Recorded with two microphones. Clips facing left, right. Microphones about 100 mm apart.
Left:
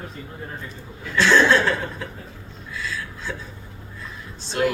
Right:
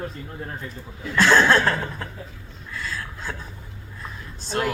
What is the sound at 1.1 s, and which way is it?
Speech, 45° right (ahead or behind).